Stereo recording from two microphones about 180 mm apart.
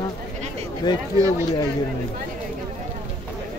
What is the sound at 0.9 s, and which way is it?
Speech, 25° left (ahead or behind).